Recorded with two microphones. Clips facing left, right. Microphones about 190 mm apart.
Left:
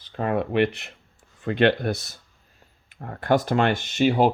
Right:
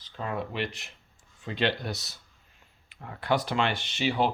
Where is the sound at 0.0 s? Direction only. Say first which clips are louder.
Left 8 dB; 60° left (ahead or behind).